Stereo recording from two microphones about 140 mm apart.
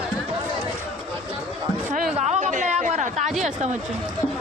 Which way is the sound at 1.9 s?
60° right (ahead or behind).